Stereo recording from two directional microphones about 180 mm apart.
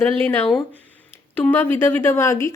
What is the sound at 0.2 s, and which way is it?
Speech, 10° left (ahead or behind).